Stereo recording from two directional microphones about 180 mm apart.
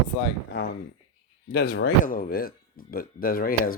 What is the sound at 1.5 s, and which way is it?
Speech, 60° left (ahead or behind).